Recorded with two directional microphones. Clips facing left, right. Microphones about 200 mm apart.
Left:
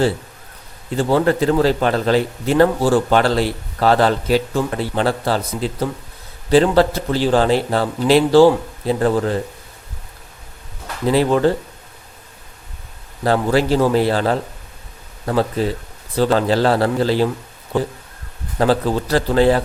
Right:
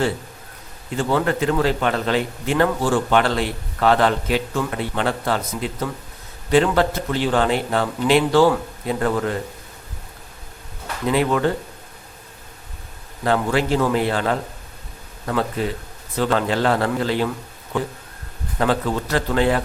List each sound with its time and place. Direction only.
0.9 s a man's voice: 35° left (ahead or behind)
11.0 s a man's voice: 35° left (ahead or behind)
13.2 s a man's voice: 35° left (ahead or behind)
16.1 s a man's voice: 35° left (ahead or behind)